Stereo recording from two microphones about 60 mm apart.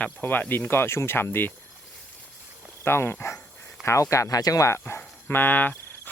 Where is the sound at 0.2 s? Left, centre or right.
Left.